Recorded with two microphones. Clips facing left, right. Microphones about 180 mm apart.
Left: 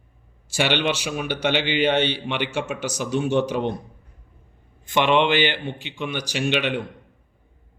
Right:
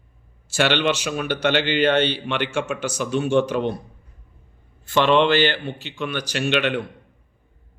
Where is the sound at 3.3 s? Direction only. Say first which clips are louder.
Right 3 dB; 10° left (ahead or behind).